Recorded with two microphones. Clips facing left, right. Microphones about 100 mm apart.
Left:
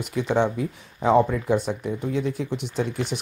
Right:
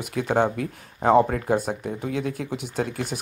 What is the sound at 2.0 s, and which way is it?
Speech, 65° right (ahead or behind).